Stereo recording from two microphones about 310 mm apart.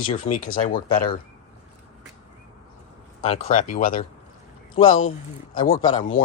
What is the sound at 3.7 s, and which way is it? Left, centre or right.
Speech, left.